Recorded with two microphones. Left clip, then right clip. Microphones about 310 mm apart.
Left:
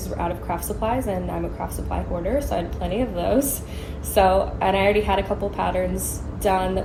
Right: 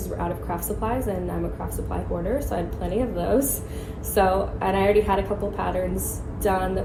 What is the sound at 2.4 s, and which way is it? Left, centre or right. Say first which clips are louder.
A woman's voice: left 3 dB; centre.